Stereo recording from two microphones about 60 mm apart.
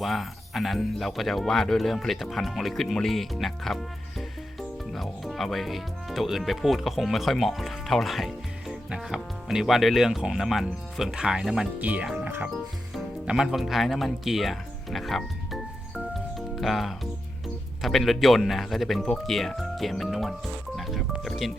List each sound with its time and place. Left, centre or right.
0.0 s speech: centre
4.9 s speech: centre
11.8 s speech: right
13.2 s speech: centre
16.0 s music: centre
17.8 s speech: centre
20.7 s music: centre
21.2 s speech: centre